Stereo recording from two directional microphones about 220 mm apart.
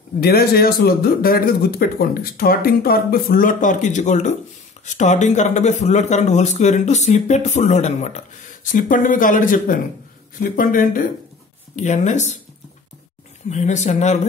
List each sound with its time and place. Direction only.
0.2 s speech: 45° left (ahead or behind)
13.5 s speech: 30° left (ahead or behind)